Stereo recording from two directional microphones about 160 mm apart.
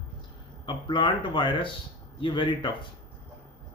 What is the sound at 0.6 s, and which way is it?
A man's voice, 30° left (ahead or behind).